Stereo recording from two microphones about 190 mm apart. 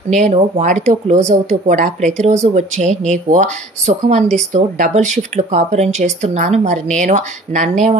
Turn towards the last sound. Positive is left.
turn(degrees=-40)  # may be behind; listen again after turning